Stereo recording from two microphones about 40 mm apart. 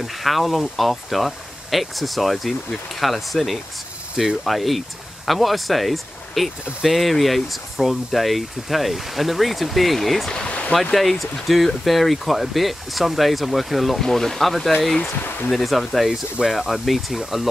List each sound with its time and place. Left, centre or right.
0.0 s speech: centre
14.0 s speech: centre
16.1 s speech: centre
16.5 s speech: centre